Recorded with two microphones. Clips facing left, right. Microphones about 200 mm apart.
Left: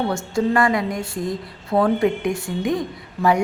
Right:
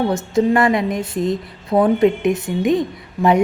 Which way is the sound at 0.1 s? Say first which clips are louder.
Right 4 dB; 20° right (ahead or behind).